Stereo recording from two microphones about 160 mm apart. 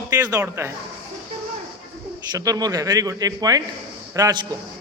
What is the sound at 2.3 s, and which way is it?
A man's voice, 20° right (ahead or behind).